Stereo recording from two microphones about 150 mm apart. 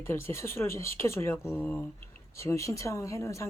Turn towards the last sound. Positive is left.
turn(degrees=20)  # may be behind; listen again after turning